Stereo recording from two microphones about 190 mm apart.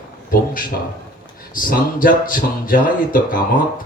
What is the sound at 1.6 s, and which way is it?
Speech, 45° left (ahead or behind).